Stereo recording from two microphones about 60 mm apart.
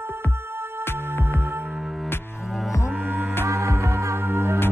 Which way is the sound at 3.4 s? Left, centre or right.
Right.